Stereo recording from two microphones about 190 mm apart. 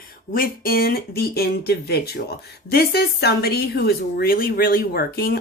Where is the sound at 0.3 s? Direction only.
50° left (ahead or behind).